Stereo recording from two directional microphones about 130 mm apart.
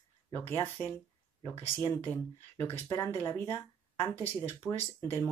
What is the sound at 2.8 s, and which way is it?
Speech, 25° left (ahead or behind).